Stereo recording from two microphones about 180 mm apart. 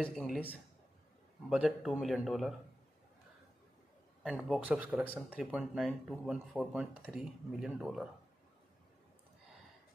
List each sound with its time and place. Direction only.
0.0 s speech: 5° left (ahead or behind)
1.5 s speech: 5° right (ahead or behind)
4.2 s speech: 5° right (ahead or behind)